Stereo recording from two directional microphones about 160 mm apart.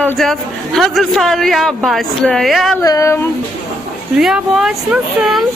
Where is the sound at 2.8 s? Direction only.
20° left (ahead or behind).